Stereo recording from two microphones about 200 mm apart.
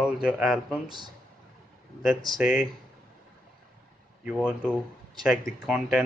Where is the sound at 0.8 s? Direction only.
20° right (ahead or behind).